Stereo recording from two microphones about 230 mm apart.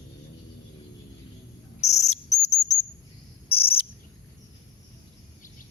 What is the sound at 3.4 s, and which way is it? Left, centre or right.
Cricket, left.